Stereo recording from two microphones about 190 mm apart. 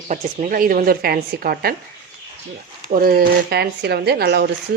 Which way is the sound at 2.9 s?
50° right (ahead or behind).